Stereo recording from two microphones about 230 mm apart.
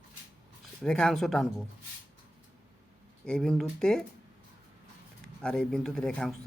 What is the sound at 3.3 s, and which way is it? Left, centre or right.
Speech, centre.